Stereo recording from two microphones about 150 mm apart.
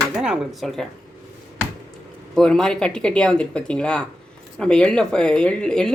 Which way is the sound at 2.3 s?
5° left (ahead or behind).